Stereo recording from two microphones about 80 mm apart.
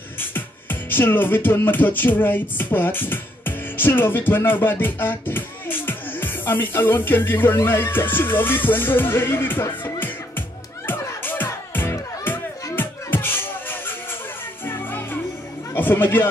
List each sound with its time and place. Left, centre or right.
0.2 s music: left
15.7 s speech: left